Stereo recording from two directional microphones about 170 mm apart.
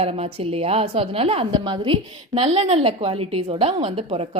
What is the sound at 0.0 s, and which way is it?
A woman's voice, 35° right (ahead or behind).